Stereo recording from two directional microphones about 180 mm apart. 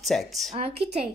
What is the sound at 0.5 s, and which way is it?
Speech, 35° right (ahead or behind).